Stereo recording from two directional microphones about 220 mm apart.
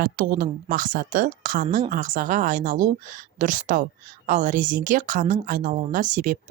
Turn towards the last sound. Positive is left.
turn(degrees=-35)  # may be behind; listen again after turning